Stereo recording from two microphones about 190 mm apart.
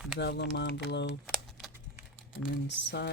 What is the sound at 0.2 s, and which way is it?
Speech, 65° left (ahead or behind).